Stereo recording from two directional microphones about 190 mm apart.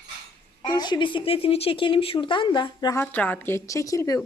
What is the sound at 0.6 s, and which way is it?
Speech, 20° left (ahead or behind).